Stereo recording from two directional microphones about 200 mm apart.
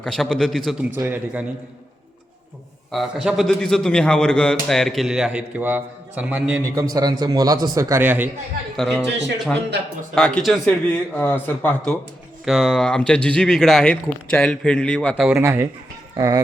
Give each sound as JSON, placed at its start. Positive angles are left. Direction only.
{"t": 0.0, "sound": "a man's voice", "side_deg": 0}
{"t": 2.9, "sound": "a man's voice", "side_deg": 0}
{"t": 8.7, "sound": "a man's voice", "side_deg": 0}
{"t": 10.2, "sound": "a man's voice", "side_deg": 5}
{"t": 15.1, "sound": "speech", "side_deg": -10}